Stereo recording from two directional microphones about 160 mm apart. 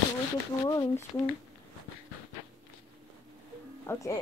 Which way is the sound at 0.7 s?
20° left (ahead or behind).